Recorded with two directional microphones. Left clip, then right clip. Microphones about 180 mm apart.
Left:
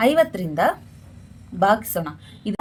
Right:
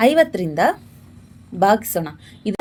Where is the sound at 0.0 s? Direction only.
30° right (ahead or behind).